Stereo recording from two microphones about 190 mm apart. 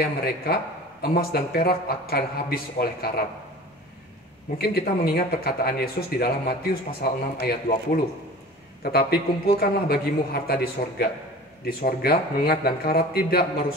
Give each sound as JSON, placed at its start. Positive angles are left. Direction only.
{"t": 0.0, "sound": "speech", "side_deg": 55}
{"t": 4.6, "sound": "speech", "side_deg": 55}